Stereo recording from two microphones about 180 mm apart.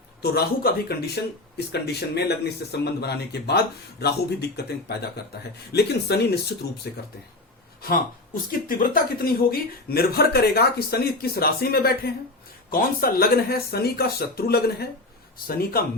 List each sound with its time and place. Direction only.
0.2 s speech: 60° left (ahead or behind)
7.8 s speech: 55° left (ahead or behind)